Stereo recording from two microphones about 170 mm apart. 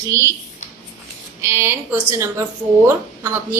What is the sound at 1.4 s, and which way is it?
A woman's voice, 15° right (ahead or behind).